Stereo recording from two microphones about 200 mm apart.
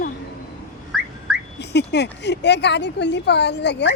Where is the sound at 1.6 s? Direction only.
60° left (ahead or behind).